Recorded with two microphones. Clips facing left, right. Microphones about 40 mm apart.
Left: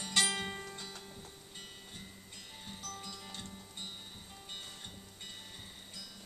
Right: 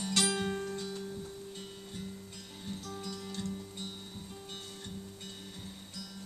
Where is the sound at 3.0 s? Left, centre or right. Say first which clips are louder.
Right 6 dB; centre.